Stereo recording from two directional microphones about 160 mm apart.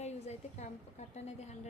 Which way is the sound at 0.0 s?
45° left (ahead or behind).